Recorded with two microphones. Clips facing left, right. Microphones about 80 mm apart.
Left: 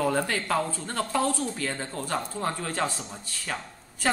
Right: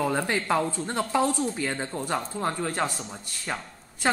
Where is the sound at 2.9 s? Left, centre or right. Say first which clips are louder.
Right 1 dB; centre.